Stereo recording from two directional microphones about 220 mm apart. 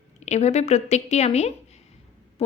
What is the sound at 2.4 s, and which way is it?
Owl, 25° left (ahead or behind).